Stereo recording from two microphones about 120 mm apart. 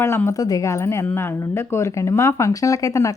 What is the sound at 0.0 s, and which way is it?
Speech, 20° left (ahead or behind).